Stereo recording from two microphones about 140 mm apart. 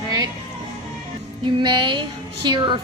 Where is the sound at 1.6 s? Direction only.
35° right (ahead or behind).